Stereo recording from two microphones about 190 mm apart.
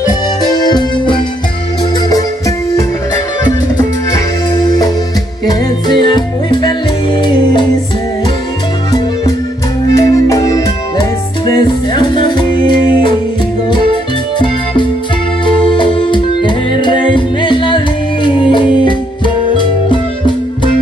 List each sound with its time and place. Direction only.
0.5 s organ: 20° left (ahead or behind)
2.0 s music: 20° left (ahead or behind)
5.5 s music: 25° left (ahead or behind)
9.9 s music: 15° left (ahead or behind)
14.4 s music: 25° left (ahead or behind)